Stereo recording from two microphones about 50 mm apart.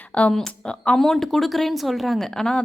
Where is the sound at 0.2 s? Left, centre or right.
Left.